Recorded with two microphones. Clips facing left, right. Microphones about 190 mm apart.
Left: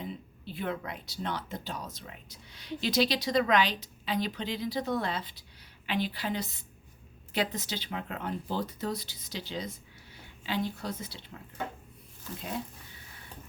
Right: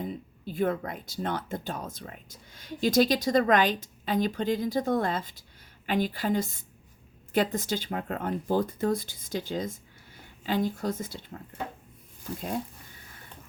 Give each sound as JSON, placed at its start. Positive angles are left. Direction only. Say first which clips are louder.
{"t": 0.0, "sound": "a woman's voice", "louder": "right 5 dB", "side_deg": -45}